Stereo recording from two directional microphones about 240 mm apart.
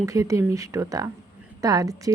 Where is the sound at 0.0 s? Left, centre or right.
Centre.